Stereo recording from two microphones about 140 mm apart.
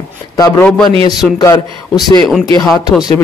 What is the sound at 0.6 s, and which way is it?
Speech, 5° left (ahead or behind).